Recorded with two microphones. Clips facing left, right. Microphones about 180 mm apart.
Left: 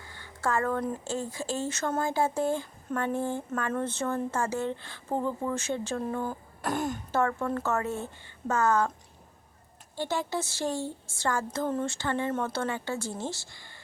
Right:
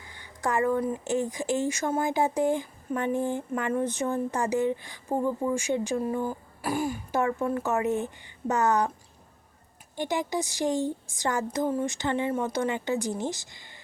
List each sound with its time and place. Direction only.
0.0 s a sound: 15° right (ahead or behind)
1.0 s speech: 20° right (ahead or behind)
10.0 s speech: 15° right (ahead or behind)